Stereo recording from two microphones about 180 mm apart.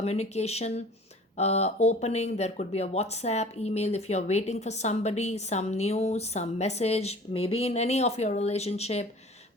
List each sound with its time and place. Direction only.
0.0 s speech: 35° left (ahead or behind)